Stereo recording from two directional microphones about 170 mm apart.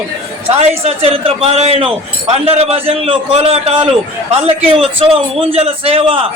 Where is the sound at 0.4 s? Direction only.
35° right (ahead or behind).